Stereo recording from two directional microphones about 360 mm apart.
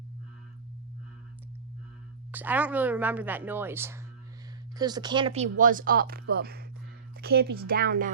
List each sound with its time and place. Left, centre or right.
2.3 s a woman's voice: centre; by 8.1 s right